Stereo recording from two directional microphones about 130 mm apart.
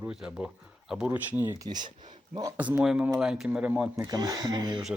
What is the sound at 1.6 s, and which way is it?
Speech, 30° right (ahead or behind).